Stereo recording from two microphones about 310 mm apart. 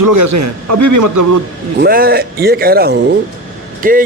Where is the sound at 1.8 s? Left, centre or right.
Right.